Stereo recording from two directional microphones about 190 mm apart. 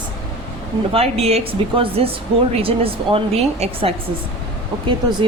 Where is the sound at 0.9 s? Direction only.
30° right (ahead or behind).